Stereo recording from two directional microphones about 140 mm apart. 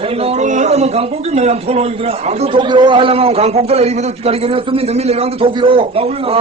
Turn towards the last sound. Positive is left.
turn(degrees=-45)  # may be behind; listen again after turning